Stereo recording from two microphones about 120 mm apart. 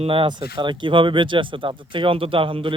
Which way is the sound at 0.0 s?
50° right (ahead or behind).